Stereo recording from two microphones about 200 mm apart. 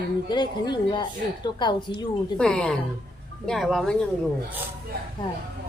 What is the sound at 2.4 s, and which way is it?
Speech, 5° left (ahead or behind).